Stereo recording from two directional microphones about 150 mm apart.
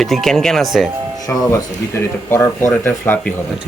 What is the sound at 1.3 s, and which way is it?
Speech, 20° left (ahead or behind).